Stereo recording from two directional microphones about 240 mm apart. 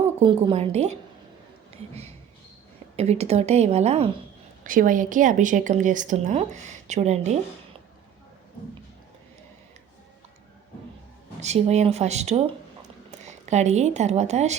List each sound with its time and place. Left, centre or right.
0.2 s a woman's voice: right
2.9 s a woman's voice: right
11.3 s a woman's voice: right